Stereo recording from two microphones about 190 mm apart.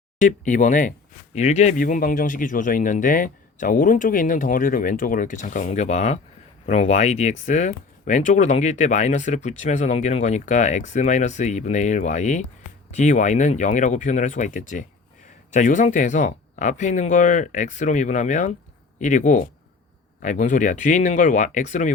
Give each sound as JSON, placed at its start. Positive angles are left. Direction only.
{"t": 0.2, "sound": "speech", "side_deg": 40}